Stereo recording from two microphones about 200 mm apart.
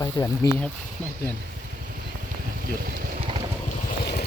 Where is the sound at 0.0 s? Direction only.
20° left (ahead or behind).